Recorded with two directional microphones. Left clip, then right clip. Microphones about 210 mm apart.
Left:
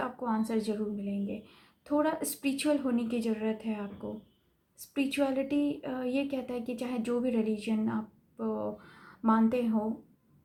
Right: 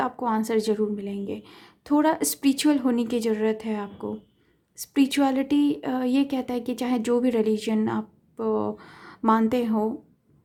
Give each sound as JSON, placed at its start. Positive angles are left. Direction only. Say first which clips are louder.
{"t": 0.0, "sound": "speech", "louder": "right 8 dB", "side_deg": -50}